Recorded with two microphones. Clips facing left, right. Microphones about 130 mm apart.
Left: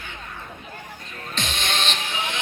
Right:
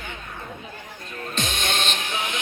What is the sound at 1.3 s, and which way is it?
Music, 50° right (ahead or behind).